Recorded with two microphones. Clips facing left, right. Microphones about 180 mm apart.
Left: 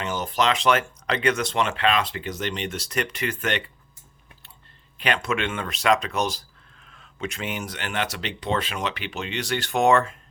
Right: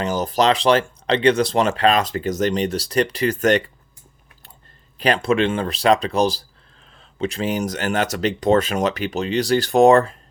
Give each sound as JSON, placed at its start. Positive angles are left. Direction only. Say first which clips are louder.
{"t": 0.0, "sound": "speech", "louder": "right 6 dB", "side_deg": -35}
{"t": 4.9, "sound": "speech", "louder": "right 7 dB", "side_deg": -35}